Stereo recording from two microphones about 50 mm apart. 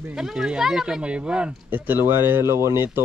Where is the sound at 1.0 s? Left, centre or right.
Right.